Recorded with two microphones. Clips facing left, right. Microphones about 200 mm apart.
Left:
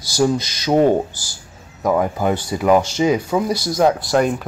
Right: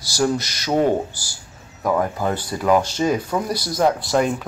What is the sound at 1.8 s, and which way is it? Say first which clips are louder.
Speech: left 3 dB; 15° left (ahead or behind).